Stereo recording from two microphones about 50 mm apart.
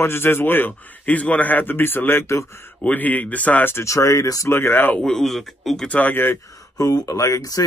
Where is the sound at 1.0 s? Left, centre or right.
Left.